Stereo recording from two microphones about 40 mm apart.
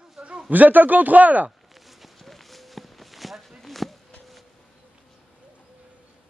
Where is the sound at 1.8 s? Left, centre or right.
Centre.